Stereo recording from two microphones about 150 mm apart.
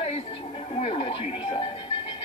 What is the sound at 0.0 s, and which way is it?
Television, 45° left (ahead or behind).